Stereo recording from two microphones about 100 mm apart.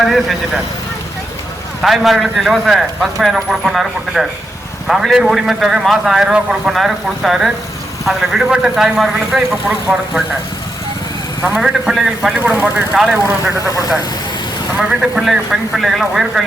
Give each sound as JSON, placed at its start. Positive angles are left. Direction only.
{"t": 0.0, "sound": "a man's voice", "side_deg": 0}
{"t": 1.8, "sound": "a man's voice", "side_deg": 0}
{"t": 9.9, "sound": "a man's voice", "side_deg": -15}
{"t": 11.4, "sound": "a man's voice", "side_deg": -5}
{"t": 14.8, "sound": "a man's voice", "side_deg": -5}